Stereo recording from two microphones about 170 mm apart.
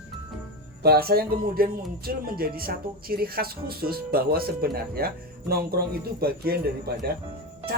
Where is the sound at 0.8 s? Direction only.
65° right (ahead or behind).